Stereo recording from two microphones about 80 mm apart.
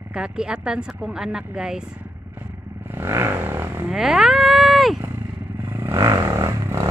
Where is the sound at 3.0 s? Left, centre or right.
Right.